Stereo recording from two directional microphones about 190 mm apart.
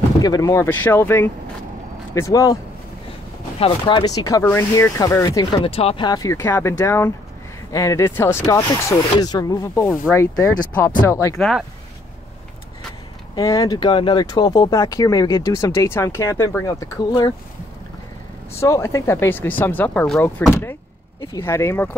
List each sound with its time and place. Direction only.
0.2 s speech: 20° left (ahead or behind)
5.6 s speech: 30° left (ahead or behind); by 11.3 s 15° left (ahead or behind)
11.3 s speech: centre (ahead or behind)
13.3 s speech: 20° left (ahead or behind)
18.6 s speech: 15° left (ahead or behind)